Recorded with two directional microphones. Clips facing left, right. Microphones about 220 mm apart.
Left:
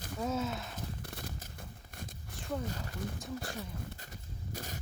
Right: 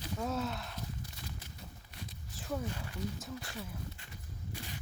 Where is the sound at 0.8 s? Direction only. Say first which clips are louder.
Left 2 dB; 55° left (ahead or behind).